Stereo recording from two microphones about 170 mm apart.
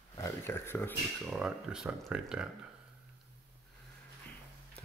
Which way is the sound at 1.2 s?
5° right (ahead or behind).